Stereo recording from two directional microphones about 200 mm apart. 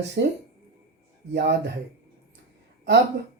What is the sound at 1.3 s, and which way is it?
Speech, 60° right (ahead or behind).